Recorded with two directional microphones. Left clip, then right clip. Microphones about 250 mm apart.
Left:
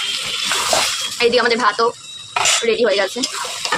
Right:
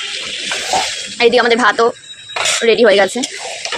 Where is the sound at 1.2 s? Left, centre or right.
Centre.